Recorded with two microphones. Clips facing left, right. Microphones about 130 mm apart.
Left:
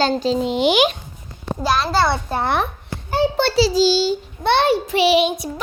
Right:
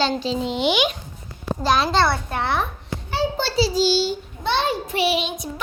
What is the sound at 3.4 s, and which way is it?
Child singing, 75° left (ahead or behind).